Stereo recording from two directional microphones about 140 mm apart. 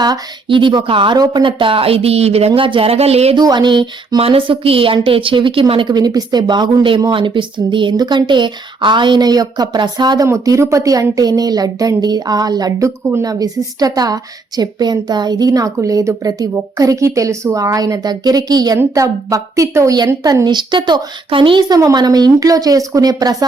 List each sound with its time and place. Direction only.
0.0 s speech: 35° right (ahead or behind)
2.5 s speech: 40° right (ahead or behind)
3.3 s a woman's voice: 30° right (ahead or behind)